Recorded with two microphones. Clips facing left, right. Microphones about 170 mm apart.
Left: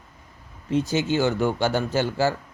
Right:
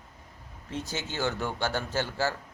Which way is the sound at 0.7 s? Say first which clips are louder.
Left 13 dB; 90° left.